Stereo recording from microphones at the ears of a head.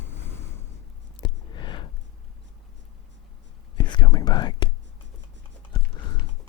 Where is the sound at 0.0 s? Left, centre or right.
Left.